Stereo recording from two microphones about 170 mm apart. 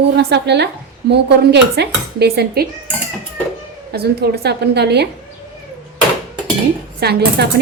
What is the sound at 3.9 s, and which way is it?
A woman's voice, 70° right (ahead or behind).